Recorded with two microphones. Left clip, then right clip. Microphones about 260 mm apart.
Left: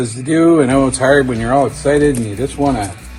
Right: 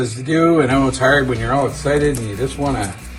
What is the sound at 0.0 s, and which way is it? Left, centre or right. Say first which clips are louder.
Speech: left 3 dB; left.